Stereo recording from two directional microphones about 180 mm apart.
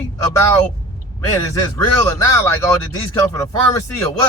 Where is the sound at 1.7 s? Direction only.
15° left (ahead or behind).